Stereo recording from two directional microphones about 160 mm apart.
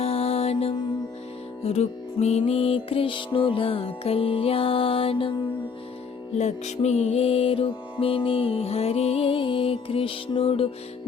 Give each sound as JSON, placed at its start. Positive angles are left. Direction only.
{"t": 0.0, "sound": "music", "side_deg": 40}
{"t": 6.3, "sound": "music", "side_deg": 45}